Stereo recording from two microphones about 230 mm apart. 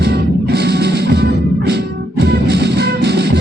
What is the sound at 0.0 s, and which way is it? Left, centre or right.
Music, right.